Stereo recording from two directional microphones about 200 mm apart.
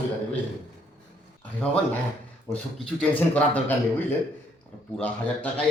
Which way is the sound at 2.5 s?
5° left (ahead or behind).